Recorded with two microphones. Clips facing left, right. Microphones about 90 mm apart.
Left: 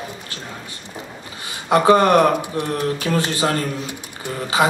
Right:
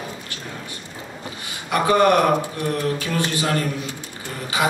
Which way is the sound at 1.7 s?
25° left (ahead or behind).